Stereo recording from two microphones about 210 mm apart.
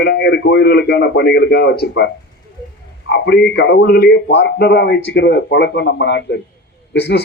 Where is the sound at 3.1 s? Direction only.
50° left (ahead or behind).